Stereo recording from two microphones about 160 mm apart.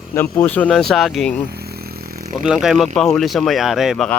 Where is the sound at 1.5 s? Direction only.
75° right (ahead or behind).